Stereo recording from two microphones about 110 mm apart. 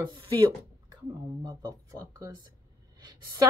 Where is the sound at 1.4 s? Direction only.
40° right (ahead or behind).